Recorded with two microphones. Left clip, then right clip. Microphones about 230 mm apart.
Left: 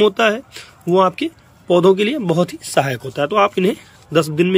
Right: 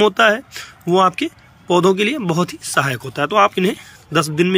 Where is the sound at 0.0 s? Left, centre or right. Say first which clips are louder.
Right 1 dB; centre.